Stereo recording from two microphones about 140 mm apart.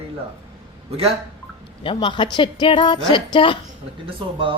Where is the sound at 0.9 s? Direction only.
45° right (ahead or behind).